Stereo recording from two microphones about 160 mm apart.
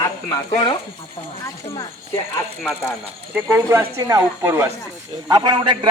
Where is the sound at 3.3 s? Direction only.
15° right (ahead or behind).